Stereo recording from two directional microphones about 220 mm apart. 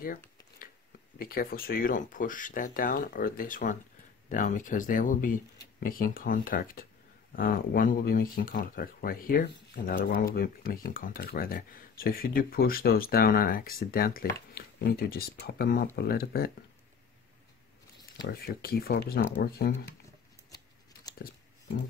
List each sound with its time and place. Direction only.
0.0 s a sound: 40° left (ahead or behind)
1.1 s speech: 40° left (ahead or behind)
18.1 s speech: 45° left (ahead or behind)